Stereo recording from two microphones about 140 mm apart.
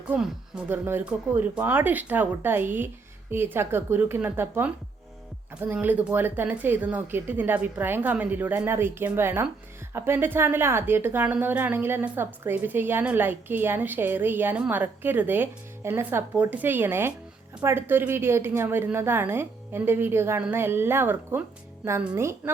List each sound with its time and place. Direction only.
0.1 s a woman's voice: 10° right (ahead or behind)